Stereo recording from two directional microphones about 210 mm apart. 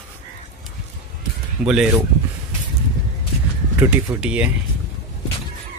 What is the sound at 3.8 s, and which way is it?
Speech, 5° right (ahead or behind).